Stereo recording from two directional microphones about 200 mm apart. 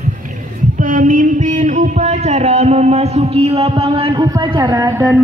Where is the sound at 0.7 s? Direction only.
40° right (ahead or behind); by 5.0 s 15° right (ahead or behind).